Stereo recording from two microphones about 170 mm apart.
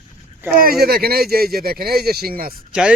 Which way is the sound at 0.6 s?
65° right (ahead or behind).